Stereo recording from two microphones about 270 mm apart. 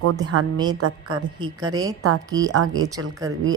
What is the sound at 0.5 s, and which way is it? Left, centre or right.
Speech, centre.